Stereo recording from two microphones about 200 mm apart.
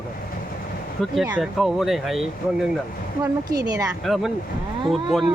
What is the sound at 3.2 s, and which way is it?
Speech, 20° right (ahead or behind).